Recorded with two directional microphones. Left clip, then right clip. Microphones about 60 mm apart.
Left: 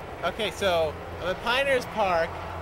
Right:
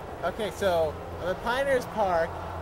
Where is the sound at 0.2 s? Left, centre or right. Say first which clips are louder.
Left 1 dB; centre.